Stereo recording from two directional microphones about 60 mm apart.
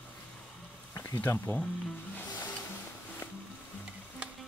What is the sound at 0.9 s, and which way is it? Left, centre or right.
Speech, left.